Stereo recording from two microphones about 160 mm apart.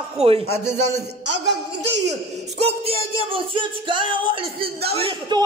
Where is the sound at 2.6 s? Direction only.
35° right (ahead or behind).